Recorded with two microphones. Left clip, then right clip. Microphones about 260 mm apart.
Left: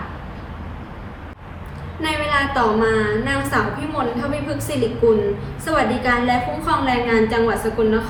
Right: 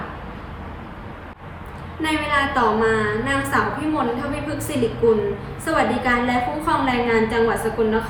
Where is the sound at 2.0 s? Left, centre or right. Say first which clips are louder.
Left 1 dB; centre.